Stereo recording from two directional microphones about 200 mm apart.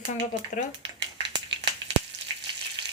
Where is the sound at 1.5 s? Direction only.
25° right (ahead or behind).